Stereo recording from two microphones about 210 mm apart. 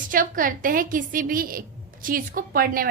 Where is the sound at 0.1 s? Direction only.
40° right (ahead or behind).